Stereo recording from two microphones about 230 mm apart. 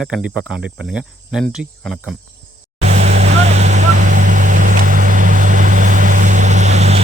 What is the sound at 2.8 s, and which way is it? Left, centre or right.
Vehicle, right.